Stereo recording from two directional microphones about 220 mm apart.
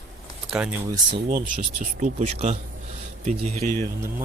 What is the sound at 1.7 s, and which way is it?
Speech, 30° right (ahead or behind).